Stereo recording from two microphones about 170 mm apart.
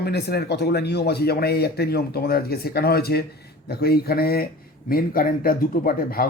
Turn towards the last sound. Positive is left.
turn(degrees=60)  # may be behind; listen again after turning